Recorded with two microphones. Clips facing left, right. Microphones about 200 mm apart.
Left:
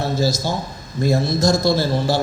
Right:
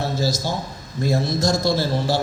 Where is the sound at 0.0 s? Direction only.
50° left (ahead or behind).